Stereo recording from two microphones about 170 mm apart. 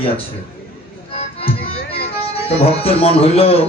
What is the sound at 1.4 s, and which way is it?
Music, 35° left (ahead or behind).